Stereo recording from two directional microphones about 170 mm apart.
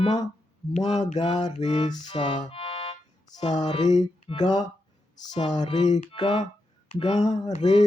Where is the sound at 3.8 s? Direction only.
45° left (ahead or behind).